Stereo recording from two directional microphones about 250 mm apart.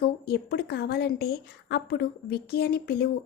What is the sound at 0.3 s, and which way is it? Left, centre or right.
A woman's voice, left.